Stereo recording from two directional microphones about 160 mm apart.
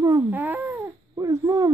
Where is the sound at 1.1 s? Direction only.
20° right (ahead or behind).